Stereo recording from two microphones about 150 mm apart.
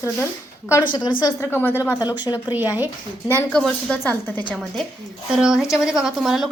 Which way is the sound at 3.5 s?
5° left (ahead or behind).